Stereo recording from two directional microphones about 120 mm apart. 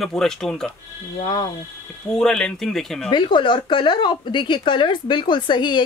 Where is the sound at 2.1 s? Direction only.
5° left (ahead or behind).